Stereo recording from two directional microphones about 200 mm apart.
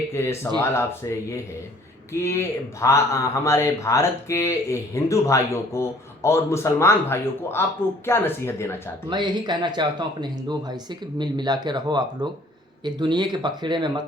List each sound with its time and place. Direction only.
0.1 s speech: 15° left (ahead or behind)
2.2 s speech: 15° left (ahead or behind)
9.0 s speech: 20° right (ahead or behind)